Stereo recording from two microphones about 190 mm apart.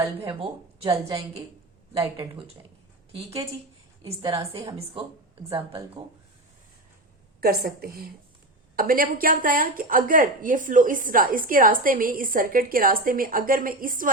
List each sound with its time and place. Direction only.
0.3 s speech: 30° right (ahead or behind)
3.1 s a woman's voice: 30° right (ahead or behind)
7.4 s a woman's voice: 55° right (ahead or behind)